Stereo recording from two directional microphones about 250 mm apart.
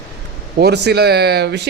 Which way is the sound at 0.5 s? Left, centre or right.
Right.